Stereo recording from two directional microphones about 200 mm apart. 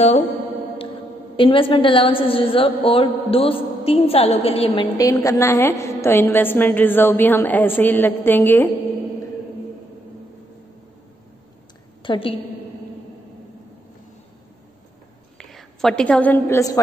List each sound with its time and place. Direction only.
1.3 s a woman's voice: 25° left (ahead or behind)
4.9 s a woman's voice: 15° left (ahead or behind)
12.0 s a woman's voice: 25° left (ahead or behind)
15.3 s a woman's voice: centre (ahead or behind)